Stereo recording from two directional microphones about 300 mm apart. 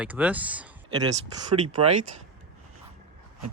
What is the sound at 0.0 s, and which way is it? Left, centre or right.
Speech, centre.